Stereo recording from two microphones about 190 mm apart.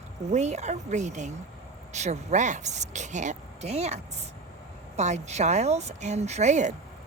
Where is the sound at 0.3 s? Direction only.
35° right (ahead or behind).